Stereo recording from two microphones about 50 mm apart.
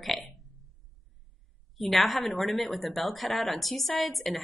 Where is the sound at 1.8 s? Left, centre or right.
Centre.